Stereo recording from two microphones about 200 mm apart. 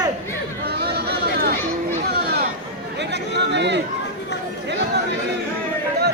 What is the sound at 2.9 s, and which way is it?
Chatter, 60° right (ahead or behind).